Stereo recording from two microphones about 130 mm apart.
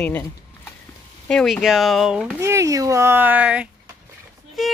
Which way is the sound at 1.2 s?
5° left (ahead or behind).